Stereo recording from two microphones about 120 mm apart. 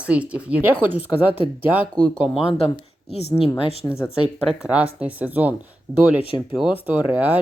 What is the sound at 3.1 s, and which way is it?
Speech, 60° left (ahead or behind).